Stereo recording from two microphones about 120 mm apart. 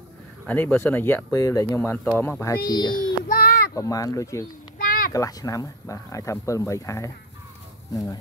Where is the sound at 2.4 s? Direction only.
30° left (ahead or behind).